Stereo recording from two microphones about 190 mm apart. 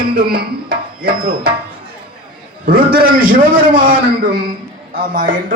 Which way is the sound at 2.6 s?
50° right (ahead or behind).